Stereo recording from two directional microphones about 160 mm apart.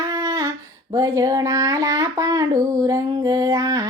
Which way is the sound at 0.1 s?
25° right (ahead or behind).